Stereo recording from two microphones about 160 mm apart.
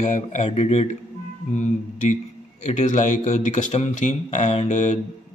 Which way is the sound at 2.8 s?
50° left (ahead or behind).